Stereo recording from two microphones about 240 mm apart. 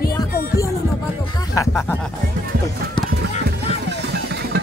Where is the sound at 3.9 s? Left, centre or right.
Right.